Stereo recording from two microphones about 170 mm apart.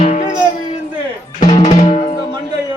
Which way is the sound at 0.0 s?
40° left (ahead or behind).